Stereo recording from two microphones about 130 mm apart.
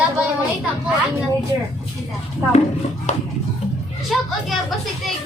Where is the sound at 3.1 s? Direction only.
60° left (ahead or behind).